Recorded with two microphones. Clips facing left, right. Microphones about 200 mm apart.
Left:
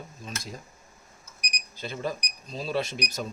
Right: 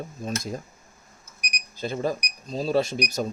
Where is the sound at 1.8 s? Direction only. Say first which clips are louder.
Right 5 dB; 45° right (ahead or behind).